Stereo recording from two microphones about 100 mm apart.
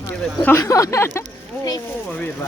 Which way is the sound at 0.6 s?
35° left (ahead or behind).